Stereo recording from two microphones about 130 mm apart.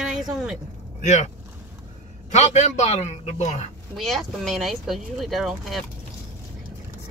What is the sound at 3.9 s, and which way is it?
Speech, centre (ahead or behind).